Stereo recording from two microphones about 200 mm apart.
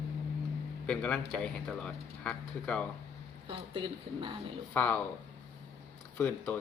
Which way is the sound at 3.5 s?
25° right (ahead or behind).